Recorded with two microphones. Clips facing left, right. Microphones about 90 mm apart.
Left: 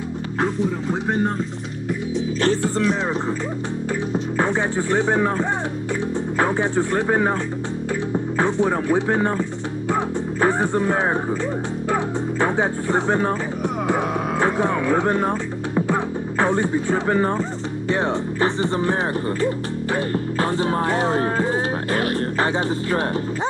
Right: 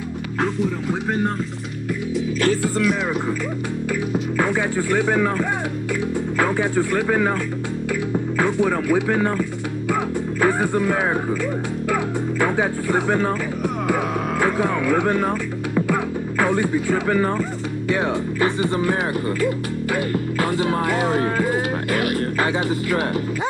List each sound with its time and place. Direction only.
0.4 s speech: centre (ahead or behind)
2.1 s speech: 30° left (ahead or behind)
4.4 s speech: 30° left (ahead or behind)
8.4 s speech: 30° left (ahead or behind)
14.4 s speech: 30° left (ahead or behind)
19.4 s music: 35° left (ahead or behind)
20.6 s speech: 30° left (ahead or behind)